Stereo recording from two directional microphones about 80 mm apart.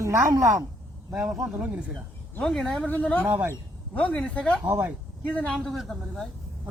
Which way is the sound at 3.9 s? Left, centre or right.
Centre.